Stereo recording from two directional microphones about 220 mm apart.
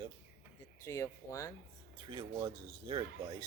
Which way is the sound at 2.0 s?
20° right (ahead or behind).